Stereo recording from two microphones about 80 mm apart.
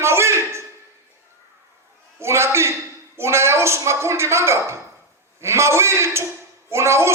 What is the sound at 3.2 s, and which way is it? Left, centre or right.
Speech, right.